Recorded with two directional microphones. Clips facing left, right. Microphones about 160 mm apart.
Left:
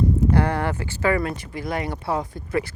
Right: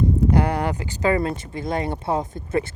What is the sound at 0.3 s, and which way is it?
Speech, 15° right (ahead or behind).